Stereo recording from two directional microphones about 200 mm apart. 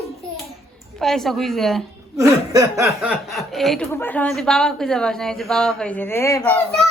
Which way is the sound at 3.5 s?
Centre (ahead or behind).